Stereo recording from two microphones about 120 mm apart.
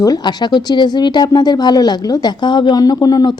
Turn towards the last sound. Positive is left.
turn(degrees=30)  # may be behind; listen again after turning